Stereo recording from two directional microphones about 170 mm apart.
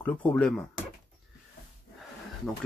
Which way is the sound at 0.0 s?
5° left (ahead or behind).